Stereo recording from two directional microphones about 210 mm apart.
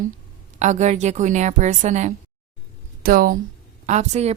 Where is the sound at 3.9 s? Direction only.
30° right (ahead or behind).